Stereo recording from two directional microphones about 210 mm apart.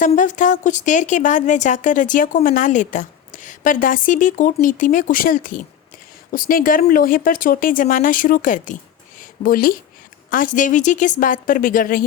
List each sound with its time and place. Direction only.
0.0 s a woman's voice: 35° left (ahead or behind)